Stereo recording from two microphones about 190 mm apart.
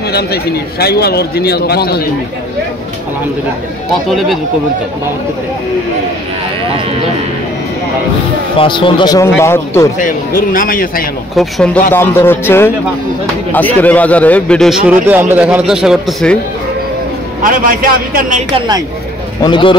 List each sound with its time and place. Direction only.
0.1 s a man's voice: 55° left (ahead or behind)
3.9 s a man's voice: centre (ahead or behind)
8.5 s speech: 25° left (ahead or behind)
9.9 s a man's voice: 45° left (ahead or behind)
11.3 s a man's voice: 5° left (ahead or behind)
17.4 s speech: 50° right (ahead or behind)
19.4 s speech: 25° left (ahead or behind)